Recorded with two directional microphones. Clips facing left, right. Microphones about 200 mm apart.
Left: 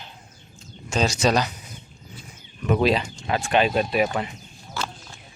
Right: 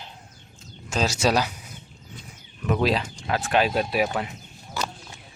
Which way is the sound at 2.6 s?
Centre (ahead or behind).